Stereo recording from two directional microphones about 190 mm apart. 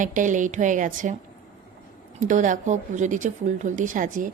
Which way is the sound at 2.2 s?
40° right (ahead or behind).